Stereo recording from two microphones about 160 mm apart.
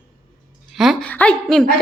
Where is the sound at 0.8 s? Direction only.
Centre (ahead or behind).